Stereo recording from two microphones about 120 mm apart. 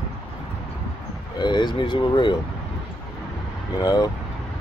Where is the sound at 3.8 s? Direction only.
30° left (ahead or behind).